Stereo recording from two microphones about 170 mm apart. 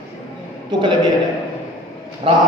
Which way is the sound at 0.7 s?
25° right (ahead or behind).